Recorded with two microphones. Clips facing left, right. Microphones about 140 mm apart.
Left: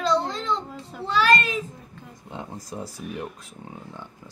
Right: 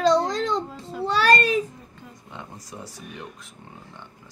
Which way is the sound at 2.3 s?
35° left (ahead or behind).